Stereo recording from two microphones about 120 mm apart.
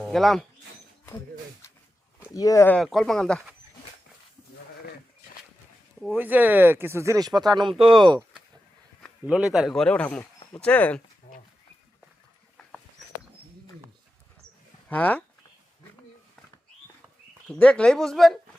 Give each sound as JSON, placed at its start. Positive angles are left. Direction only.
{"t": 0.0, "sound": "speech", "side_deg": 0}
{"t": 2.3, "sound": "speech", "side_deg": 30}
{"t": 2.8, "sound": "a man's voice", "side_deg": 0}
{"t": 6.1, "sound": "speech", "side_deg": -15}
{"t": 9.2, "sound": "a man's voice", "side_deg": -5}
{"t": 14.8, "sound": "speech", "side_deg": 15}
{"t": 17.5, "sound": "a man's voice", "side_deg": 5}